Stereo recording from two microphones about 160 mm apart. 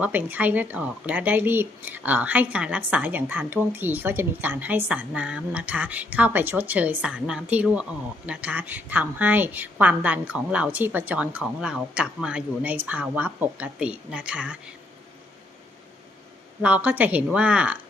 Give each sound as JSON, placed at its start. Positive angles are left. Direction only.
{"t": 0.0, "sound": "speech", "side_deg": -10}
{"t": 16.6, "sound": "speech", "side_deg": -10}